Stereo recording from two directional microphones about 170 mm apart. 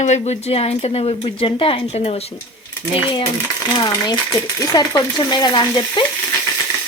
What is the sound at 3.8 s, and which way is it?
Speech, 25° left (ahead or behind).